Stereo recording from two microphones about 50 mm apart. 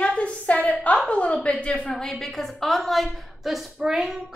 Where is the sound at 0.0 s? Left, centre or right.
Left.